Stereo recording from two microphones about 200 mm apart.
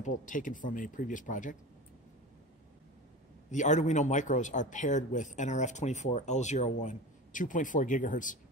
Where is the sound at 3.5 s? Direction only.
35° left (ahead or behind).